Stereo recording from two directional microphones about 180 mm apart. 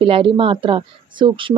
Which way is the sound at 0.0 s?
30° right (ahead or behind).